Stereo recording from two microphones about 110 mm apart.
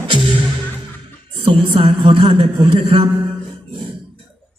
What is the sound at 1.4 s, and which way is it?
A man's voice, 50° right (ahead or behind).